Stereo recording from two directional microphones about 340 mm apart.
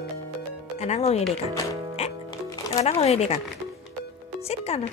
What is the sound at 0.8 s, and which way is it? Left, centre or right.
Speech, centre.